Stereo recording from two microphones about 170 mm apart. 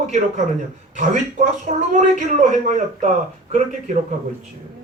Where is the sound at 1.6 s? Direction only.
50° right (ahead or behind).